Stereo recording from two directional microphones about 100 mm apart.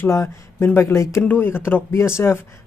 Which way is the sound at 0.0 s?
25° left (ahead or behind).